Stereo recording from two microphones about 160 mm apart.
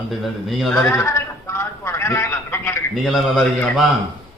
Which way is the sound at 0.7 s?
15° left (ahead or behind).